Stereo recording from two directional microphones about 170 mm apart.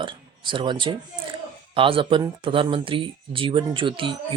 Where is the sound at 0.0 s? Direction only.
30° right (ahead or behind).